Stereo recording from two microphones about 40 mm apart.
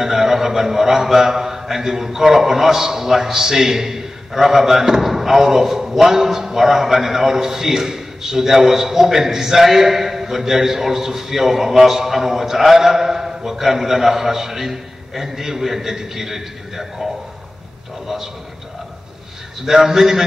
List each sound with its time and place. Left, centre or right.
0.0 s a man's voice: centre
18.0 s a man's voice: centre
19.6 s a man's voice: centre